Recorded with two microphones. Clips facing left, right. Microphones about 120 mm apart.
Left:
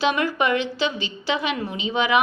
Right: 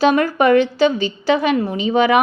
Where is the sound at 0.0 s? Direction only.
40° right (ahead or behind).